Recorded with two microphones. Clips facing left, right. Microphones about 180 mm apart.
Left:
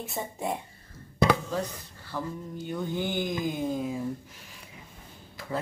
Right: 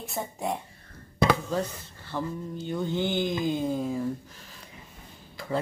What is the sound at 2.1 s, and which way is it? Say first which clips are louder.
Speech: right 3 dB; 5° right (ahead or behind).